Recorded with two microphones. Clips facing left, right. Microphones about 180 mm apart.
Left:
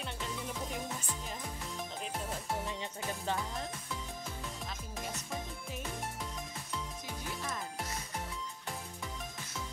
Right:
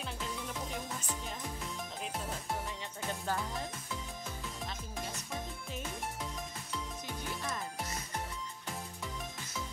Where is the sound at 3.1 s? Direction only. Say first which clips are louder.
Right 1 dB; centre (ahead or behind).